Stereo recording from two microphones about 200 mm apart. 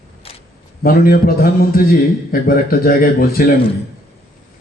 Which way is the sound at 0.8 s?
45° left (ahead or behind).